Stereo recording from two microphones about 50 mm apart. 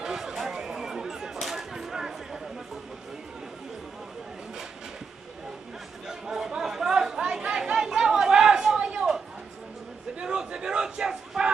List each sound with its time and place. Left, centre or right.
0.0 s chatter: centre
6.0 s chatter: centre
10.1 s a sound: centre